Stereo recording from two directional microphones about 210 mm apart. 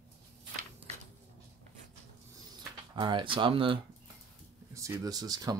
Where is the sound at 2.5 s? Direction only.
20° right (ahead or behind).